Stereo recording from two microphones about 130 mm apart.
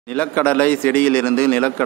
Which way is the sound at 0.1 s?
10° left (ahead or behind).